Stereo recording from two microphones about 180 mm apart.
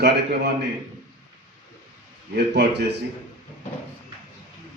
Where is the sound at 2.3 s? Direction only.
65° right (ahead or behind).